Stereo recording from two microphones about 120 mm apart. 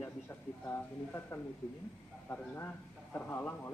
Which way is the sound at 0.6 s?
20° left (ahead or behind).